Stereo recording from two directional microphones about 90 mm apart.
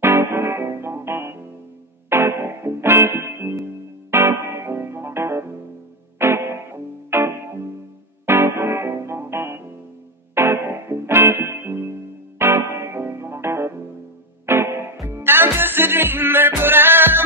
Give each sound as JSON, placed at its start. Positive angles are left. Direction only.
{"t": 0.0, "sound": "music", "side_deg": -25}